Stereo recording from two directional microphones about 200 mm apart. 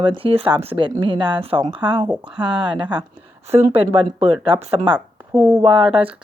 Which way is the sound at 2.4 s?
25° right (ahead or behind).